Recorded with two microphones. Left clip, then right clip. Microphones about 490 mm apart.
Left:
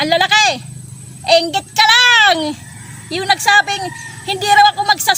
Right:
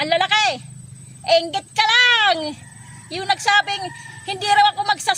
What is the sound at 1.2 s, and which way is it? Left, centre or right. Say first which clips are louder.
Child singing: left 5 dB; right.